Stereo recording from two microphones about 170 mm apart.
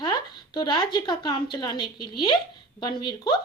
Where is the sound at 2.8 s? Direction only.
25° left (ahead or behind).